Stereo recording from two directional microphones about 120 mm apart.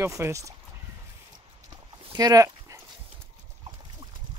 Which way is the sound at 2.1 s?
30° right (ahead or behind).